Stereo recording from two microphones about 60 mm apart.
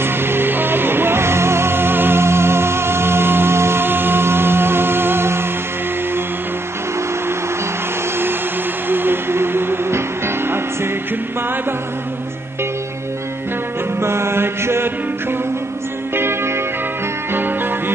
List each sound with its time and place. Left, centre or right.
0.0 s music: right
8.8 s music: right
13.9 s mantra: right
16.2 s music: right
17.3 s music: right